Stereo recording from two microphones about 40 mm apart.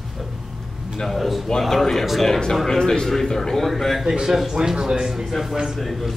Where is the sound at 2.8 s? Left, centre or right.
Centre.